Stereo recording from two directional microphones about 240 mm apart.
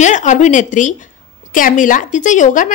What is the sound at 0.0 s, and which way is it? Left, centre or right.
A woman's voice, left.